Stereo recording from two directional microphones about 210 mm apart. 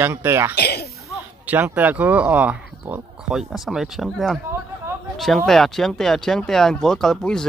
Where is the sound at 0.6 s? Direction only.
50° left (ahead or behind).